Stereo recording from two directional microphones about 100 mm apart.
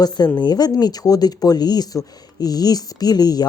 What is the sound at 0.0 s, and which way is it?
Speech, 45° left (ahead or behind).